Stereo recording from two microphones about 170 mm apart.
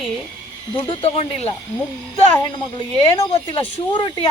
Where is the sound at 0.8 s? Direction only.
35° left (ahead or behind).